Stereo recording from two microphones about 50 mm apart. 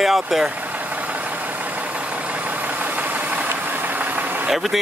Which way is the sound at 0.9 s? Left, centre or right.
Right.